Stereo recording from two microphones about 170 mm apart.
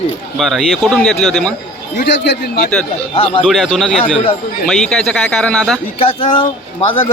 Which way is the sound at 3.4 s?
Centre (ahead or behind).